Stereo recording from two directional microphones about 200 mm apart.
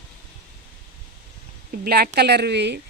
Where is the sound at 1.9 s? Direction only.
50° right (ahead or behind).